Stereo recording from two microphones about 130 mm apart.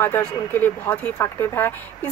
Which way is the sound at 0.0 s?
15° left (ahead or behind).